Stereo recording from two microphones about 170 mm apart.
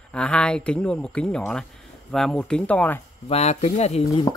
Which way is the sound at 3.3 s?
40° left (ahead or behind).